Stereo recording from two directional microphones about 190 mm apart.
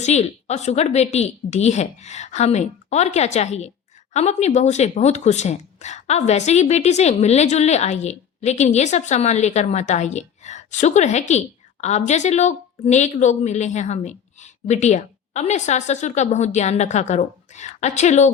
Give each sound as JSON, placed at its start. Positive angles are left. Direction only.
{"t": 0.0, "sound": "a woman's voice", "side_deg": 35}